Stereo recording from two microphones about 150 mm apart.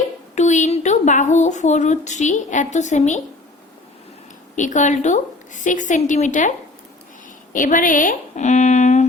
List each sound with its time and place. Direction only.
0.3 s a woman's voice: 55° left (ahead or behind)
4.5 s a woman's voice: 55° left (ahead or behind)
7.5 s speech: 65° left (ahead or behind)